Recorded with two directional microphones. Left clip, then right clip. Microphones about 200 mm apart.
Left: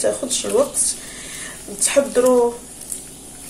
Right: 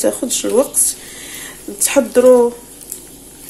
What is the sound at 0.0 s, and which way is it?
Speech, 45° right (ahead or behind).